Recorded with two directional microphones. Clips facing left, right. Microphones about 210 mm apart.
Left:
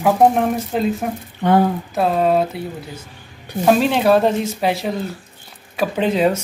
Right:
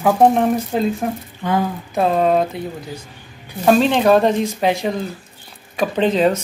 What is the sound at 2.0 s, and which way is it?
Speech, 5° left (ahead or behind).